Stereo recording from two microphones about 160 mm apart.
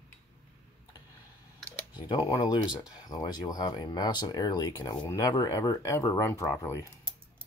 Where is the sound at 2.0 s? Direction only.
25° left (ahead or behind).